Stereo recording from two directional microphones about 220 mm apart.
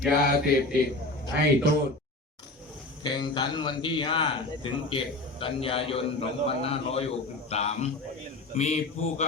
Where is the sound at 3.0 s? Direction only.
20° left (ahead or behind).